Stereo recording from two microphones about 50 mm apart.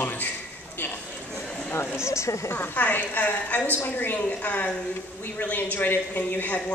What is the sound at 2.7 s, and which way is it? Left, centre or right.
A woman's voice, left.